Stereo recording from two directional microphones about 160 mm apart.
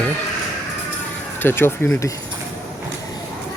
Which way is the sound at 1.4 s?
15° left (ahead or behind).